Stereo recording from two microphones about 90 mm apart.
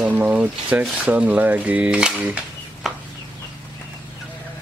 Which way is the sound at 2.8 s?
5° right (ahead or behind).